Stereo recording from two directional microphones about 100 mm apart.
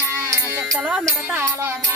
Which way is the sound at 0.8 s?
15° right (ahead or behind).